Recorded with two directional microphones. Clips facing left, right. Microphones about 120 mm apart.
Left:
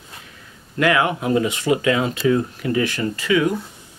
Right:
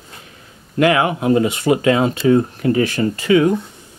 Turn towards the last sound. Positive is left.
turn(degrees=-30)  # may be behind; listen again after turning